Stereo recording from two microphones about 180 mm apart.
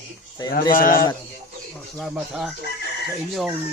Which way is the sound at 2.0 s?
Centre (ahead or behind).